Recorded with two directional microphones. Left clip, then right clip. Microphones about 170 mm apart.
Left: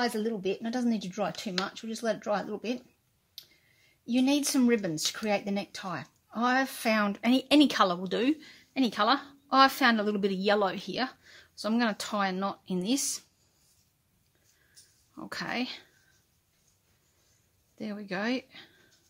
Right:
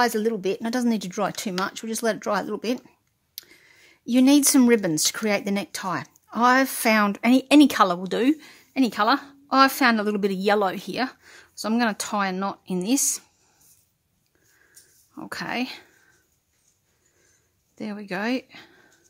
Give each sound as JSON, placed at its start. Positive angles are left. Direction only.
{"t": 0.0, "sound": "speech", "side_deg": -60}
{"t": 4.0, "sound": "speech", "side_deg": -55}
{"t": 15.1, "sound": "speech", "side_deg": -30}
{"t": 17.7, "sound": "speech", "side_deg": -30}